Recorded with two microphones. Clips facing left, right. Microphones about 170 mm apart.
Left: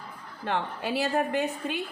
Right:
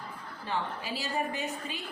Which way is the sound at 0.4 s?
60° left (ahead or behind).